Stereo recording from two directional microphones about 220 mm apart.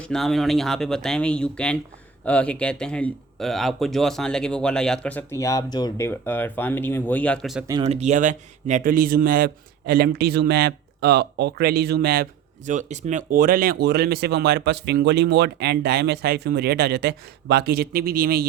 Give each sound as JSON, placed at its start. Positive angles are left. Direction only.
{"t": 0.0, "sound": "speech", "side_deg": 0}
{"t": 7.7, "sound": "a man's voice", "side_deg": -25}